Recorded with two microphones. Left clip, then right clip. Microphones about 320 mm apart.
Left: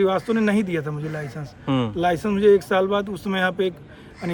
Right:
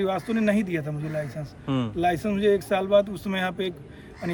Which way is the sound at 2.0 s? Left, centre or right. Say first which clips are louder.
Left 2 dB; centre.